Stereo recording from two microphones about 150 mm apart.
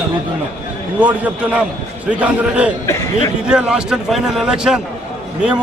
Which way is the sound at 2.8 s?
20° left (ahead or behind).